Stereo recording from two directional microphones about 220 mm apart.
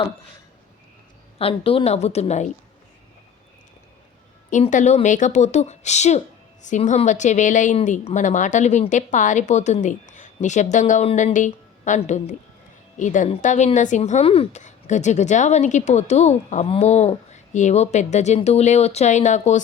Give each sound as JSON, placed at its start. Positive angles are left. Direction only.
{"t": 1.4, "sound": "a woman's voice", "side_deg": 25}
{"t": 4.4, "sound": "speech", "side_deg": 35}